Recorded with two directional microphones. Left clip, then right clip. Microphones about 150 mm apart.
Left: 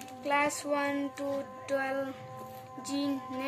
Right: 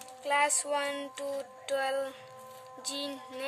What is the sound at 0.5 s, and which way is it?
Music, 60° right (ahead or behind).